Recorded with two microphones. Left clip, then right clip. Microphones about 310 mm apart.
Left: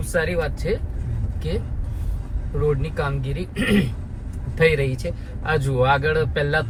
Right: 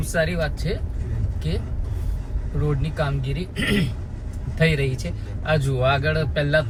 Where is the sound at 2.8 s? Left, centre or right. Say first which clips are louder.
Left 1 dB; centre.